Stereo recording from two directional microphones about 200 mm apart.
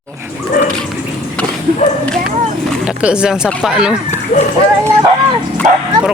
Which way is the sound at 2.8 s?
5° right (ahead or behind).